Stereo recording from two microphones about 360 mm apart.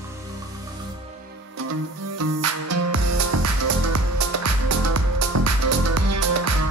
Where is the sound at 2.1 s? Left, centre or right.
Right.